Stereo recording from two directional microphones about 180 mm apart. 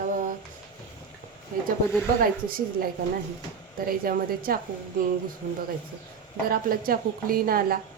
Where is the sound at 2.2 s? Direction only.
50° right (ahead or behind).